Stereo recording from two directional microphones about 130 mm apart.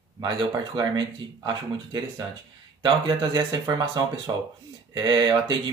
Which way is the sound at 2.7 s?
35° right (ahead or behind).